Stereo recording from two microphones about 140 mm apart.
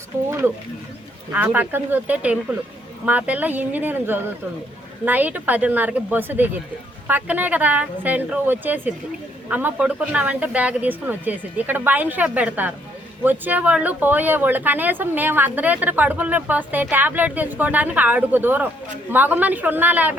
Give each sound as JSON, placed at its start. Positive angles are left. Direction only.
{"t": 0.3, "sound": "speech", "side_deg": -20}